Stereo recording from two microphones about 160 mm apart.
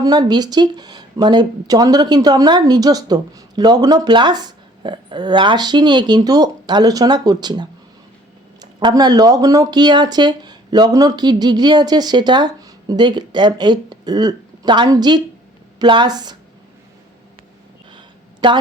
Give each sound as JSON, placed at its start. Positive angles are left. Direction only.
{"t": 0.0, "sound": "speech", "side_deg": -25}
{"t": 8.8, "sound": "speech", "side_deg": -25}
{"t": 17.9, "sound": "a sound", "side_deg": -30}